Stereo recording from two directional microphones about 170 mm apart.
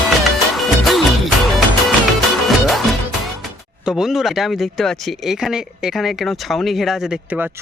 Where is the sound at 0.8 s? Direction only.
Centre (ahead or behind).